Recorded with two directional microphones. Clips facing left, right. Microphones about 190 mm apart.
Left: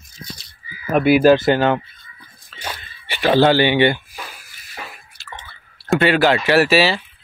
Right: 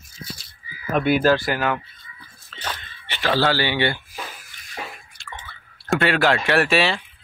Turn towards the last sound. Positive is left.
turn(degrees=5)  # may be behind; listen again after turning